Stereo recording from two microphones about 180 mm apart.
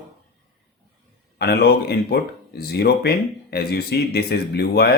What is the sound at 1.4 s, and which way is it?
Speech, 65° left (ahead or behind).